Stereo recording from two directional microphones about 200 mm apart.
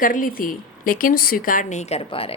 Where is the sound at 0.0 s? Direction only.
45° left (ahead or behind).